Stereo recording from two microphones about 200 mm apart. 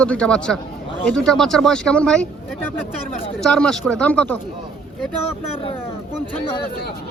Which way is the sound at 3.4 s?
5° left (ahead or behind).